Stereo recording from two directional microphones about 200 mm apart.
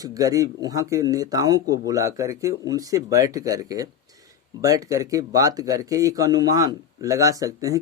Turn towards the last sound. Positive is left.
turn(degrees=-15)  # may be behind; listen again after turning